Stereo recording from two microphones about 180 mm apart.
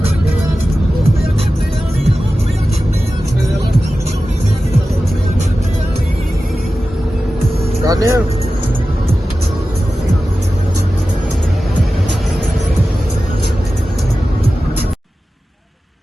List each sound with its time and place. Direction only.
7.9 s vehicle: 15° right (ahead or behind)